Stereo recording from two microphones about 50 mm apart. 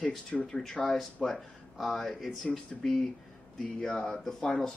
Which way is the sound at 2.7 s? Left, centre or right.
Centre.